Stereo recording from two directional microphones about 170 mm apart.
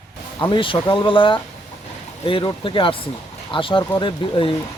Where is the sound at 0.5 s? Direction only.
30° left (ahead or behind).